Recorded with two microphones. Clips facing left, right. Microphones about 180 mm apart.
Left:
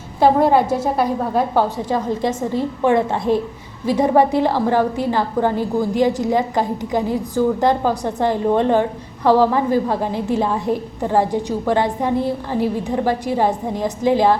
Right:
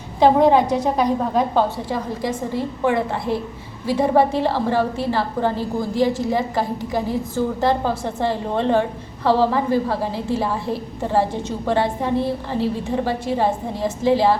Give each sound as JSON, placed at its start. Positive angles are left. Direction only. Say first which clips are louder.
{"t": 0.2, "sound": "a woman's voice", "louder": "even", "side_deg": 5}
{"t": 2.6, "sound": "a woman's voice", "louder": "left 4 dB", "side_deg": 20}